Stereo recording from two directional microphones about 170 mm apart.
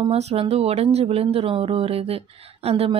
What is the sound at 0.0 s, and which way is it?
Speech, 35° right (ahead or behind).